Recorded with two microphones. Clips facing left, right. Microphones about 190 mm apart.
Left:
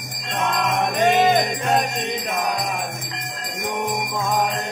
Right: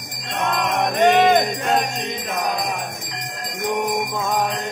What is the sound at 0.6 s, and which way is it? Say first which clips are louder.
Jingle bell: right 2 dB; 60° right (ahead or behind).